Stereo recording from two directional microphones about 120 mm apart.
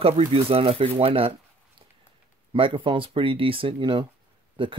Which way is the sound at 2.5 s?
45° right (ahead or behind).